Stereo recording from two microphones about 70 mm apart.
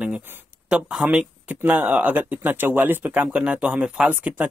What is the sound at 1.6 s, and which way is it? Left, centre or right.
Speech, right.